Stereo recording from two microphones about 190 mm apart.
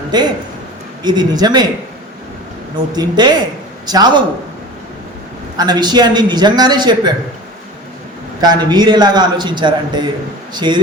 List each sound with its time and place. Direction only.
0.1 s a man's voice: 20° right (ahead or behind)
2.7 s a man's voice: 20° right (ahead or behind)
5.5 s a man's voice: 20° right (ahead or behind)
8.4 s a man's voice: 20° right (ahead or behind)